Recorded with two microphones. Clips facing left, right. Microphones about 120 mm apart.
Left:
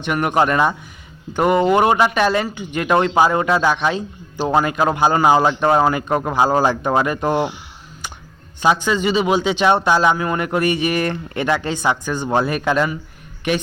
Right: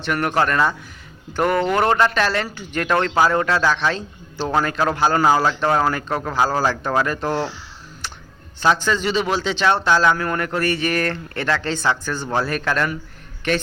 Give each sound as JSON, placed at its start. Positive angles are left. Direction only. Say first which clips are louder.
{"t": 0.0, "sound": "a man's voice", "louder": "left 3 dB", "side_deg": 10}
{"t": 8.6, "sound": "a man's voice", "louder": "left 2 dB", "side_deg": 10}